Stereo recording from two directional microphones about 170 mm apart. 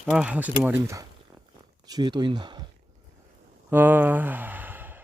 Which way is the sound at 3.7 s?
10° right (ahead or behind).